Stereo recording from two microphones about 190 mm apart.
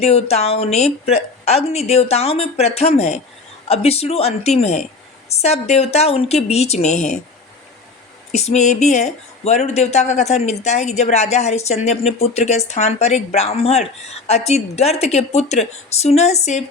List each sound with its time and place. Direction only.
0.0 s speech: 35° left (ahead or behind)
8.3 s speech: 35° left (ahead or behind)